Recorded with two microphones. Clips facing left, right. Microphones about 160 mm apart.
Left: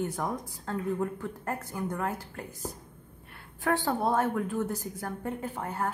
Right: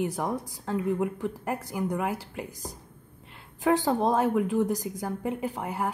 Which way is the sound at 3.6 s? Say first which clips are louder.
Right 4 dB; 20° right (ahead or behind).